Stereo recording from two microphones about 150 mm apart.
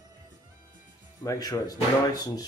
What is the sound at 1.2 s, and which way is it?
Speech, 25° left (ahead or behind).